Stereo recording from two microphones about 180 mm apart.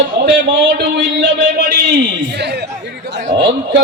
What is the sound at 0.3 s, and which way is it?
A man's voice, 75° right (ahead or behind).